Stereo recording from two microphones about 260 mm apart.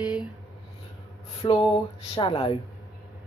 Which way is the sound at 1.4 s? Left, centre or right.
Centre.